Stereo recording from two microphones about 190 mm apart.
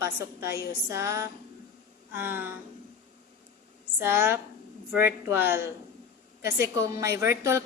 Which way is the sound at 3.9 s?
10° right (ahead or behind).